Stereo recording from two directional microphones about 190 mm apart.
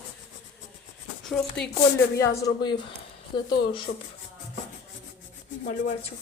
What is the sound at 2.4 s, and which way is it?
Speech, 25° left (ahead or behind).